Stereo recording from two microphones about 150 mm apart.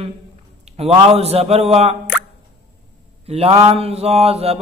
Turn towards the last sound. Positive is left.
turn(degrees=-45)  # may be behind; listen again after turning